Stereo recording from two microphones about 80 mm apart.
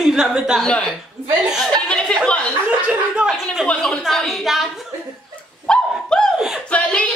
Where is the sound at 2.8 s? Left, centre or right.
Centre.